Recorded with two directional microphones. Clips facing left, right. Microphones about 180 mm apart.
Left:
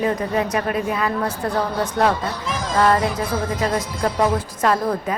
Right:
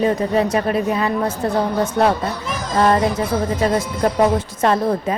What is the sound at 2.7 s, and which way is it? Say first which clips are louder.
A woman's voice: right 2 dB; 30° right (ahead or behind).